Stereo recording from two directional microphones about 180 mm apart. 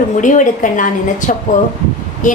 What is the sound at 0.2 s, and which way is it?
Speech, 45° left (ahead or behind).